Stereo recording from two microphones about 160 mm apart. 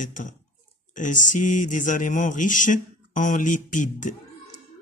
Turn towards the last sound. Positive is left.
turn(degrees=50)  # may be behind; listen again after turning